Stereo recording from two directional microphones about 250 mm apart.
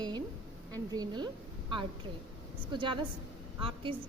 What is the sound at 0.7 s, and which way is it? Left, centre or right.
A woman's voice, centre.